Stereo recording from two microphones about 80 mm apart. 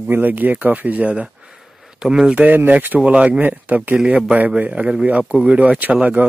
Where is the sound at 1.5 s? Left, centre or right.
Centre.